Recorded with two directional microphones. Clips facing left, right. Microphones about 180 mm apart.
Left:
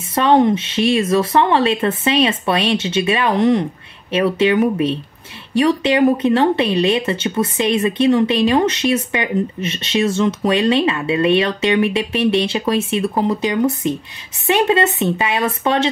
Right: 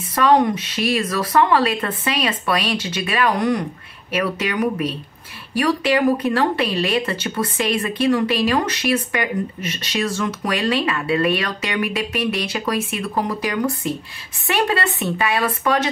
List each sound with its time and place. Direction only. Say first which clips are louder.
0.1 s speech: left 3 dB; 25° left (ahead or behind)